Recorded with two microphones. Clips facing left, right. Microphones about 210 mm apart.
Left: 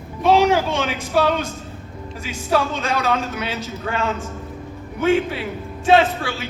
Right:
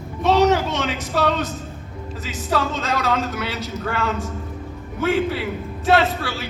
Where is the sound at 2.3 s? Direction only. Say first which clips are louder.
Left 2 dB; 15° left (ahead or behind).